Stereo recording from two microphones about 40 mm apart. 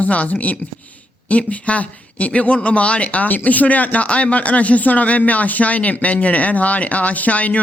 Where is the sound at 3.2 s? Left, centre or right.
Left.